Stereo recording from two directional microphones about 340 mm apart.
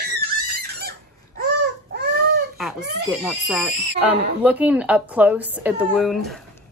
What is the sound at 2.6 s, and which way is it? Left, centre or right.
Speech, centre.